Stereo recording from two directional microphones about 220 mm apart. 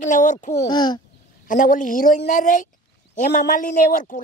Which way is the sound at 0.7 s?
20° left (ahead or behind).